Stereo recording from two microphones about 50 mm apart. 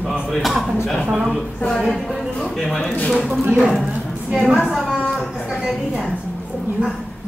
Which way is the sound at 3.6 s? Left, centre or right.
Centre.